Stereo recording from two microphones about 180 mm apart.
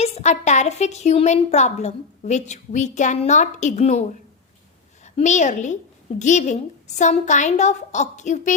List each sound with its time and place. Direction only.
0.0 s a woman's voice: 40° left (ahead or behind)
5.0 s a woman's voice: 40° left (ahead or behind)